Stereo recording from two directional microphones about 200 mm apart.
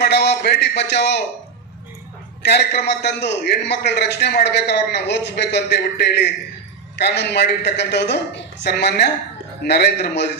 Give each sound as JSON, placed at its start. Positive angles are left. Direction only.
{"t": 0.0, "sound": "a man's voice", "side_deg": 55}
{"t": 2.4, "sound": "a man's voice", "side_deg": 55}